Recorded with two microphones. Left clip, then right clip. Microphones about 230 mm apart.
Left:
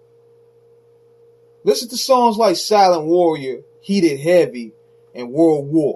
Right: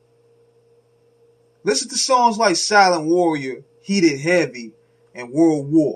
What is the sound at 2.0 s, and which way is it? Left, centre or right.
Speech, right.